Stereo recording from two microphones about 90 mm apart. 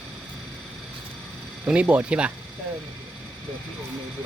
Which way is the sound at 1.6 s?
15° right (ahead or behind).